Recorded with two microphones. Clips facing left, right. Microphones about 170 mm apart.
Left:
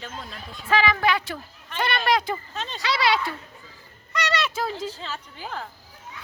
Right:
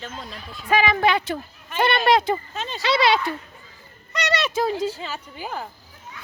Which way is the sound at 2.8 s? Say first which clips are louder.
Right 4 dB; 25° right (ahead or behind).